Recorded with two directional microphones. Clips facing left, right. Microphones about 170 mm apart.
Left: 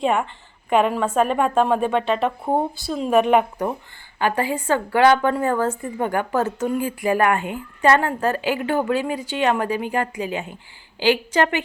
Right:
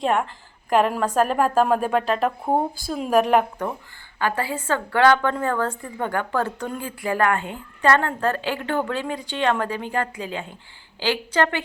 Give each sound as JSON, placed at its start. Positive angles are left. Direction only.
{"t": 0.0, "sound": "a woman's voice", "side_deg": 0}
{"t": 4.2, "sound": "a woman's voice", "side_deg": 15}